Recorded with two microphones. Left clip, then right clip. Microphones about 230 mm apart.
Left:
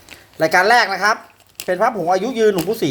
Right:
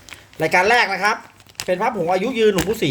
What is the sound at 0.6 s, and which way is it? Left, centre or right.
Speech, centre.